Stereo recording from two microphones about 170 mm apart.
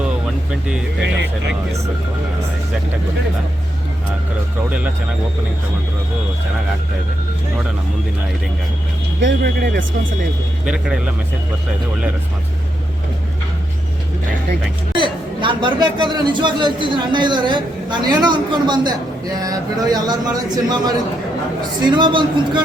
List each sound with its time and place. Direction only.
9.2 s speech: 70° right (ahead or behind)
10.7 s speech: 5° right (ahead or behind)
14.9 s a man's voice: 30° right (ahead or behind)